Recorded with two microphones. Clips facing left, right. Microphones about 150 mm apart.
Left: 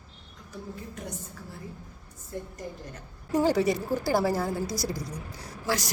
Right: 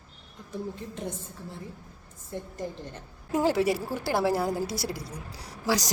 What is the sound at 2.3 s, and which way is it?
Speech, 25° right (ahead or behind).